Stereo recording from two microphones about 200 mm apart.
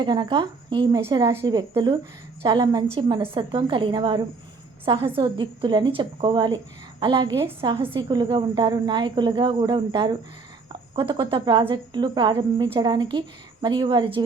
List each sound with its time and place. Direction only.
0.0 s speech: 20° right (ahead or behind)